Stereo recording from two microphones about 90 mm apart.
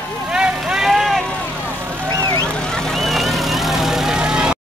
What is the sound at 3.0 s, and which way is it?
Vehicle, centre (ahead or behind).